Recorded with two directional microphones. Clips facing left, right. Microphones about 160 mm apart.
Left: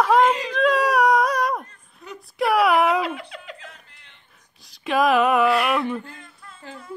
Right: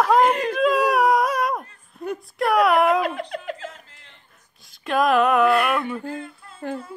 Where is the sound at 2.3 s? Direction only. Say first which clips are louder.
Even; centre (ahead or behind).